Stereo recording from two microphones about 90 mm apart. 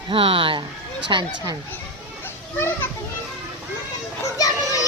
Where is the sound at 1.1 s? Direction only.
55° right (ahead or behind).